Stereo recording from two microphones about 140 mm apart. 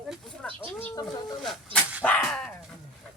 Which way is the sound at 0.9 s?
30° left (ahead or behind).